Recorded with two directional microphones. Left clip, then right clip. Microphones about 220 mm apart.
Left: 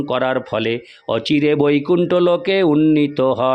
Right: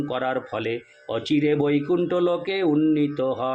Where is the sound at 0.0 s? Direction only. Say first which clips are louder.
Left 7 dB; 50° left (ahead or behind).